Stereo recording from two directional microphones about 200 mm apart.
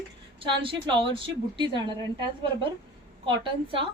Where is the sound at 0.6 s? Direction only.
25° right (ahead or behind).